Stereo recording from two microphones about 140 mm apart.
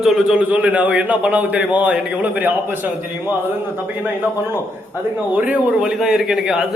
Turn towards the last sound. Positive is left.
turn(degrees=-5)  # may be behind; listen again after turning